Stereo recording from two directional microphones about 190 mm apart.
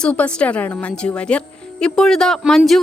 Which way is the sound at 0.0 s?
5° left (ahead or behind).